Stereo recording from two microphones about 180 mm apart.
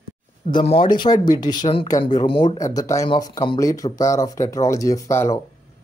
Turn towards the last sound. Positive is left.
turn(degrees=15)  # may be behind; listen again after turning